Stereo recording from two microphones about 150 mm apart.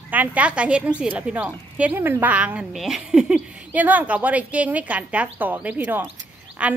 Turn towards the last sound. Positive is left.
turn(degrees=-10)  # may be behind; listen again after turning